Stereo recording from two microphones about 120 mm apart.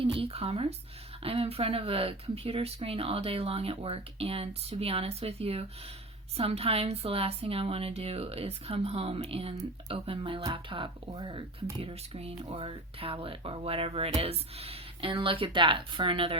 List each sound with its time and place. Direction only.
0.0 s a woman's voice: 50° right (ahead or behind)
11.8 s speech: 55° right (ahead or behind)